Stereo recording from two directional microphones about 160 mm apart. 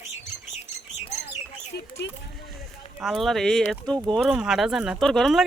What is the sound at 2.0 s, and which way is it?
Speech, 90° left.